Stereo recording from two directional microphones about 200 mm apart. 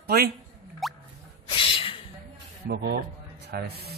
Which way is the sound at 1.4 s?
25° left (ahead or behind).